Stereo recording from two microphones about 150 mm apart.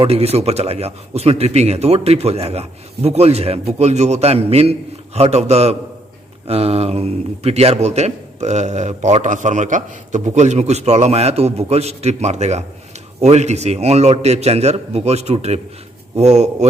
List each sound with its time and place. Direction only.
0.0 s a man's voice: 40° right (ahead or behind)